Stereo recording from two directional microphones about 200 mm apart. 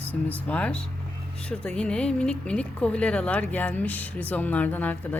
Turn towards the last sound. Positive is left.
turn(degrees=10)  # may be behind; listen again after turning